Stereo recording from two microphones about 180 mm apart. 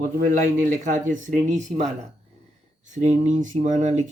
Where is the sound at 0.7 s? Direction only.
45° right (ahead or behind).